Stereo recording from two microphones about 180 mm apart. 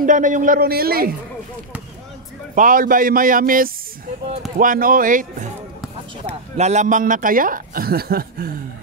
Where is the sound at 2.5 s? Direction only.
50° right (ahead or behind).